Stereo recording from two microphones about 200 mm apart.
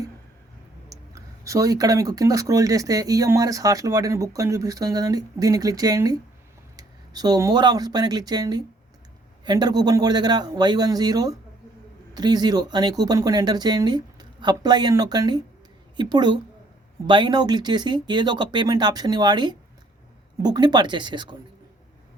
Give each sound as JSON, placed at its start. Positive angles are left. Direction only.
{"t": 0.9, "sound": "speech", "side_deg": -15}